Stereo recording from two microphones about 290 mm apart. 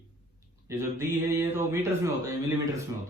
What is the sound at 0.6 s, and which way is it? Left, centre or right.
Speech, centre.